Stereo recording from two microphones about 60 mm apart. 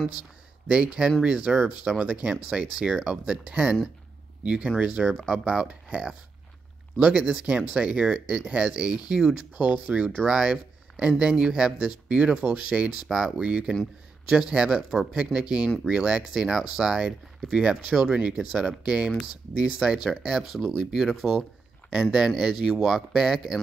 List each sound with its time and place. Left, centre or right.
0.7 s speech: centre
5.0 s speech: centre